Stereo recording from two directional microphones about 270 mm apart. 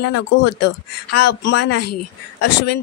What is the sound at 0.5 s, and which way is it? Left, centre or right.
Speech, left.